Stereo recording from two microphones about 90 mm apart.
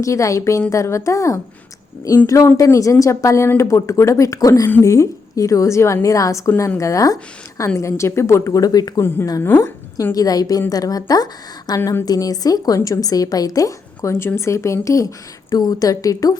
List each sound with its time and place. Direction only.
0.0 s a woman's voice: 35° left (ahead or behind)
9.0 s a woman's voice: 25° left (ahead or behind)
9.6 s a woman's voice: 40° left (ahead or behind)